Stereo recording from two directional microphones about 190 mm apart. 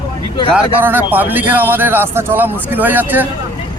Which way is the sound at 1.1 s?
10° right (ahead or behind).